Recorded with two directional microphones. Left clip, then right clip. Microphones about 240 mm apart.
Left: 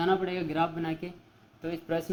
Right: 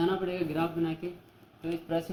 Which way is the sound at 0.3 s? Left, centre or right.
Left.